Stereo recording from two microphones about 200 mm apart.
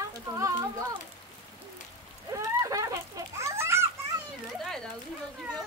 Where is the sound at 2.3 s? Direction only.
15° right (ahead or behind).